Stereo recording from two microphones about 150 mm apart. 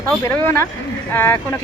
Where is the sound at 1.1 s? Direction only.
15° left (ahead or behind).